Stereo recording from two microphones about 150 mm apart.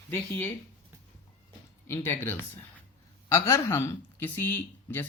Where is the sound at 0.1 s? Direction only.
15° left (ahead or behind).